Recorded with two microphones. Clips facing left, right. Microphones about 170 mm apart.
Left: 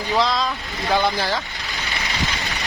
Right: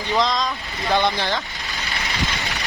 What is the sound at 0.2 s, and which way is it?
Speech, 5° left (ahead or behind).